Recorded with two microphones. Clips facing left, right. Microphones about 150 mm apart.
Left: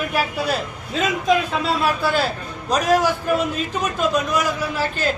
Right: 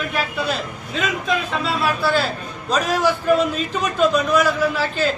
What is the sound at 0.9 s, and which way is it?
Speech, 40° left (ahead or behind).